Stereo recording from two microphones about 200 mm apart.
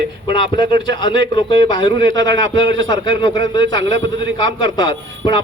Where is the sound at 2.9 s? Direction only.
65° right (ahead or behind).